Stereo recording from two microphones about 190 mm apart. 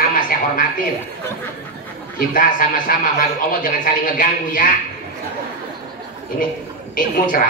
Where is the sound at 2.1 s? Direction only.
45° left (ahead or behind).